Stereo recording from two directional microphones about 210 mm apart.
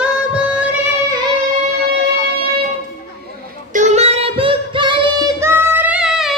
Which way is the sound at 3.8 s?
30° right (ahead or behind).